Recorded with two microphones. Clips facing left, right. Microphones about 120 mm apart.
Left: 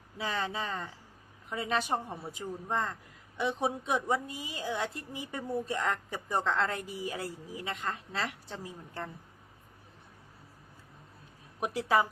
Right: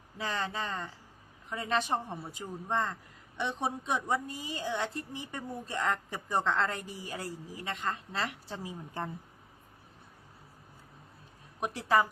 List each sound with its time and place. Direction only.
0.2 s a woman's voice: centre (ahead or behind)
11.6 s a woman's voice: 10° left (ahead or behind)